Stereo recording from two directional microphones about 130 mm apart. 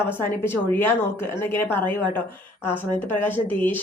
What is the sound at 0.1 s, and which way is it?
Speech, 15° left (ahead or behind).